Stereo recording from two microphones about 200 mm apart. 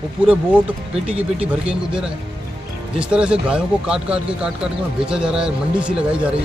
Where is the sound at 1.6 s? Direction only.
5° right (ahead or behind).